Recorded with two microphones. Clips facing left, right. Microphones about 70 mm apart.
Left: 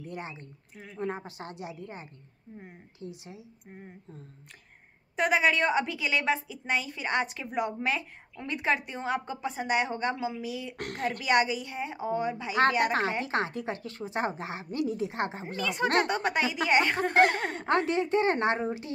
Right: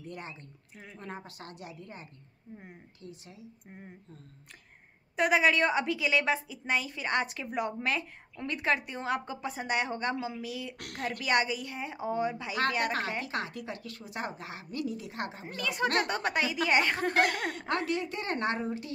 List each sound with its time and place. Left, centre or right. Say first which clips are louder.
0.0 s a woman's voice: left 3 dB; centre
5.1 s a woman's voice: even; centre
10.8 s speech: left 4 dB; left
11.2 s a woman's voice: left 3 dB; centre
13.2 s speech: left 5 dB; left
15.6 s a woman's voice: left 3 dB; centre
17.1 s a woman's voice: left 4 dB; left